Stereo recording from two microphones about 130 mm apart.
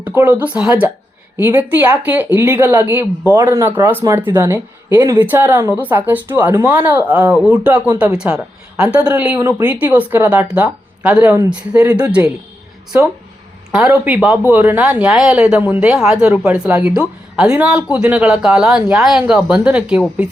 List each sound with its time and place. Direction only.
0.0 s speech: 15° right (ahead or behind)
13.8 s speech: 20° right (ahead or behind)
14.1 s speech: 5° right (ahead or behind)